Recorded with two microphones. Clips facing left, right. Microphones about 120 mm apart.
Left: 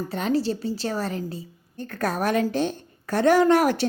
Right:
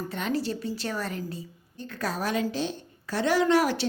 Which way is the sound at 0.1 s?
35° left (ahead or behind).